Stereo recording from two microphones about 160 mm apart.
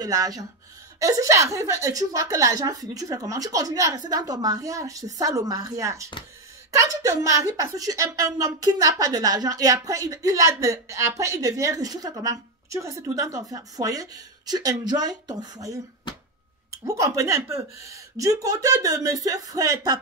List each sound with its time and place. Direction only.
0.0 s a woman's voice: 25° right (ahead or behind)
16.8 s a woman's voice: 20° right (ahead or behind)